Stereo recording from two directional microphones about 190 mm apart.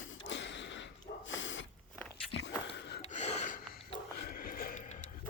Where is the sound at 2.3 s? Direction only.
65° left (ahead or behind).